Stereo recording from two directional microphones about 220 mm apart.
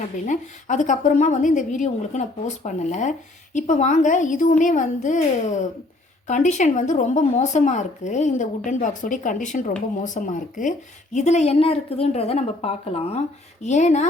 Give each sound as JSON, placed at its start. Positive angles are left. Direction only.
{"t": 0.3, "sound": "a woman's voice", "side_deg": 35}